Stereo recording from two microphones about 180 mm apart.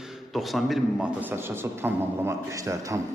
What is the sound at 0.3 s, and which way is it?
A man's voice, centre (ahead or behind).